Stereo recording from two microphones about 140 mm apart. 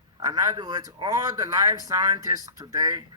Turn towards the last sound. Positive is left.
turn(degrees=-25)  # may be behind; listen again after turning